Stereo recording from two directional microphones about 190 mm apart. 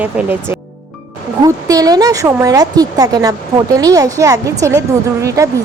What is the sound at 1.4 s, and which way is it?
A woman's voice, 20° right (ahead or behind).